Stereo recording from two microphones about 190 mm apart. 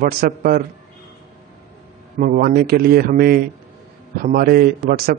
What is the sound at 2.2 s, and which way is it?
A man's voice, 50° right (ahead or behind).